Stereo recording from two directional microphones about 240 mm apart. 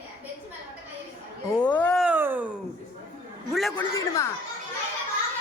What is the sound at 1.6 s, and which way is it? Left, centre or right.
Cat, centre.